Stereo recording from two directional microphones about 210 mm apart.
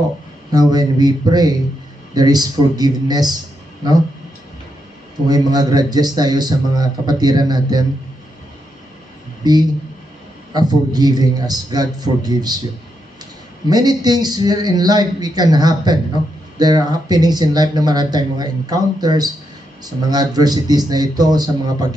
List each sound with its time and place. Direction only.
0.5 s speech: 20° right (ahead or behind)
5.3 s speech: 20° right (ahead or behind)
9.4 s speech: 20° right (ahead or behind)
13.7 s speech: 20° right (ahead or behind)